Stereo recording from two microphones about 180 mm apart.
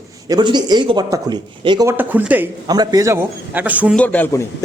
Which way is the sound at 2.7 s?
20° right (ahead or behind).